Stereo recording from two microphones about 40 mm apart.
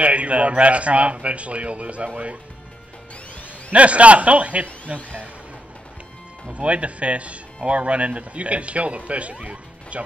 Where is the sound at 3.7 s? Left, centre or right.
Right.